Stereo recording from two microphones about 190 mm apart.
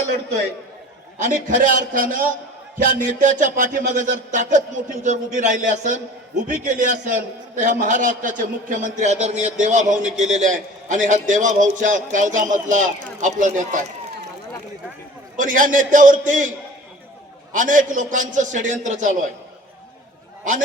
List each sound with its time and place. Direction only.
1.2 s a man's voice: 40° right (ahead or behind)
2.7 s music: 45° right (ahead or behind)
15.4 s a man's voice: 45° right (ahead or behind)
17.5 s music: 45° right (ahead or behind)